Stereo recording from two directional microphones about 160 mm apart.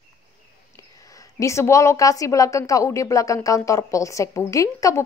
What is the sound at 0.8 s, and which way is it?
A woman's voice, 20° left (ahead or behind).